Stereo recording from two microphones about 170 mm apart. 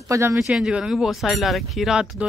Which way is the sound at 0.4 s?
5° right (ahead or behind).